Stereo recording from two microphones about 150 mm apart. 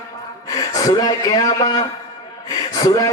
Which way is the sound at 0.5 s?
25° left (ahead or behind).